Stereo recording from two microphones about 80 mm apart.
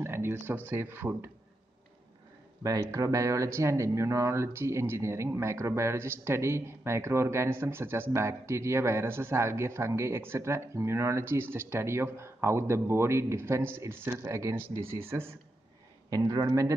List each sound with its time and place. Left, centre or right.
0.0 s a sound: right
0.7 s speech: right
2.6 s speech: right
16.1 s a man's voice: right